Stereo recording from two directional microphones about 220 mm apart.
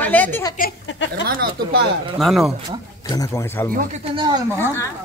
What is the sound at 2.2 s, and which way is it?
Speech, centre (ahead or behind).